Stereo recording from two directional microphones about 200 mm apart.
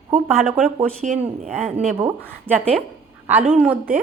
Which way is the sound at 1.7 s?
30° right (ahead or behind).